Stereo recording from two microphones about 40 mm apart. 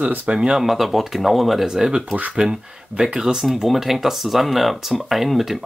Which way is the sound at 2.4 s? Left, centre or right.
Centre.